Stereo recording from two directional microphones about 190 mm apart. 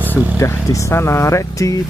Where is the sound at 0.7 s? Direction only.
15° left (ahead or behind).